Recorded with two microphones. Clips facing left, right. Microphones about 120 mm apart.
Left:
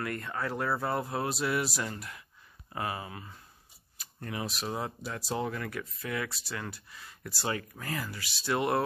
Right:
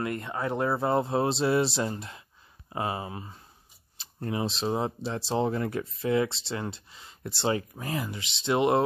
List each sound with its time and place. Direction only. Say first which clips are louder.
0.0 s speech: right 4 dB; 20° right (ahead or behind)